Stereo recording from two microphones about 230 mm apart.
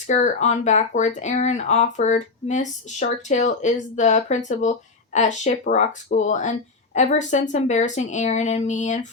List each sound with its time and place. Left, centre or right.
0.1 s speech: left